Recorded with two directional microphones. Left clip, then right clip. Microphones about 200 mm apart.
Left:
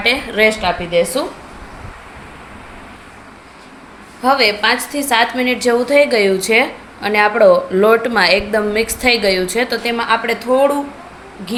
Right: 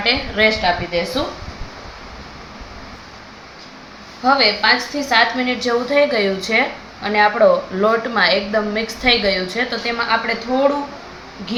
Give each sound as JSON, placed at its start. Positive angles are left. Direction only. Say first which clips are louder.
{"t": 0.0, "sound": "a woman's voice", "louder": "left 2 dB", "side_deg": 50}
{"t": 4.2, "sound": "a woman's voice", "louder": "left 1 dB", "side_deg": 50}